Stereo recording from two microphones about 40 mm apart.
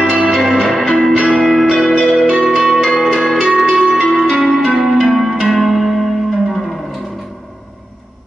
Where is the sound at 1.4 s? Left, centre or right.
Centre.